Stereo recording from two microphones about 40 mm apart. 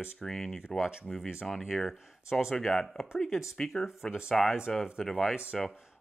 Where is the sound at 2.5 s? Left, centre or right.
Centre.